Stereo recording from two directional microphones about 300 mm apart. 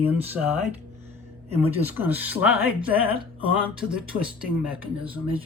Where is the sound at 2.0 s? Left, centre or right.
Centre.